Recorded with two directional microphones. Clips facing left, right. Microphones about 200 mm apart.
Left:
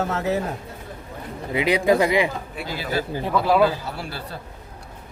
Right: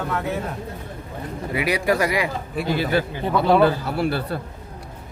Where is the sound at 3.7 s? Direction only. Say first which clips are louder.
Right 6 dB; 60° right (ahead or behind).